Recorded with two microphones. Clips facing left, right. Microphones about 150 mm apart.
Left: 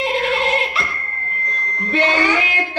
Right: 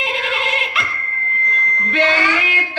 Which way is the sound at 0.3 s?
35° left (ahead or behind).